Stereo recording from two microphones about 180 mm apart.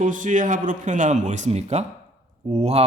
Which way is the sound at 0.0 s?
45° right (ahead or behind).